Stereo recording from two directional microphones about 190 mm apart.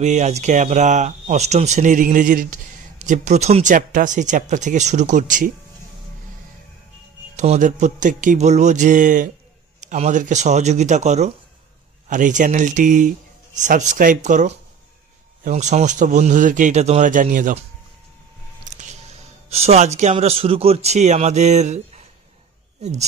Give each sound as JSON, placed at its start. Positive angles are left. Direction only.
{"t": 0.0, "sound": "speech", "side_deg": -35}
{"t": 7.3, "sound": "speech", "side_deg": -40}
{"t": 18.7, "sound": "squish", "side_deg": -40}
{"t": 19.5, "sound": "speech", "side_deg": -35}